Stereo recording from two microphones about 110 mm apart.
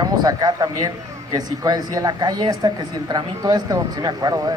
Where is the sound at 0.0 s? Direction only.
35° right (ahead or behind).